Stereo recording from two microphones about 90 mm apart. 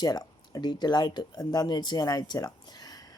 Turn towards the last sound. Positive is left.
turn(degrees=45)  # may be behind; listen again after turning